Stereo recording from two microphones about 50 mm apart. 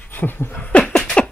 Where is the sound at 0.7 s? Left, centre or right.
Left.